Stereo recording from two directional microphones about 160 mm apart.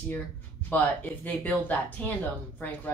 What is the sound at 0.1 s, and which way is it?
Speech, 10° left (ahead or behind).